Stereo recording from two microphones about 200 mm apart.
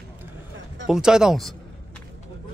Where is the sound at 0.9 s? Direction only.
5° right (ahead or behind).